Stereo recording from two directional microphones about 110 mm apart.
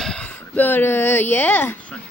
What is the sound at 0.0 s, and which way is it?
Speech, 10° left (ahead or behind).